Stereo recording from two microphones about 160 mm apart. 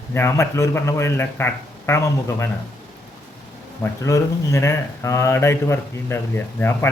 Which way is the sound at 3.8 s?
20° left (ahead or behind).